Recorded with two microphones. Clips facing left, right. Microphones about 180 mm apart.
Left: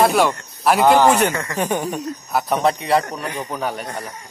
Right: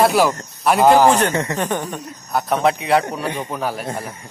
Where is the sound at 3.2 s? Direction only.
25° right (ahead or behind).